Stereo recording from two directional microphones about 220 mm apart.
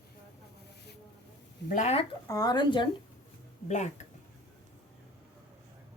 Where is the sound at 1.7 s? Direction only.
30° left (ahead or behind).